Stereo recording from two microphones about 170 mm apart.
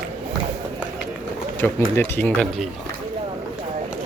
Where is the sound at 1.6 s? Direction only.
15° left (ahead or behind).